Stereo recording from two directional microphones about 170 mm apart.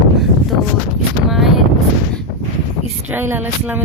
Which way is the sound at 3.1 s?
10° right (ahead or behind).